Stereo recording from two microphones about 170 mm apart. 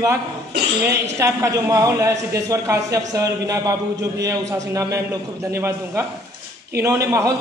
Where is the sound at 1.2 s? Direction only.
20° right (ahead or behind).